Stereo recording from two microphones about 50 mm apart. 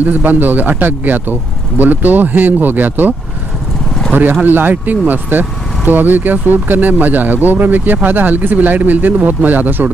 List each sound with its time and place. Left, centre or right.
0.0 s speech: right